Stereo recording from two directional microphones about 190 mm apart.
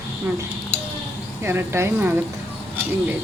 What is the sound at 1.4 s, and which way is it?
Speech, 15° right (ahead or behind).